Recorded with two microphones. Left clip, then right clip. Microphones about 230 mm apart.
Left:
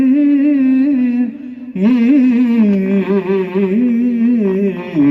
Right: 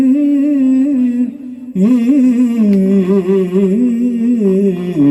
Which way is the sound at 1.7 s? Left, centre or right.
Right.